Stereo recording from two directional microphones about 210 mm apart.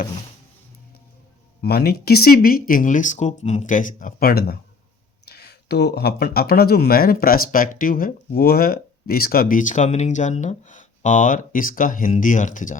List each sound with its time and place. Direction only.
1.6 s speech: 50° left (ahead or behind)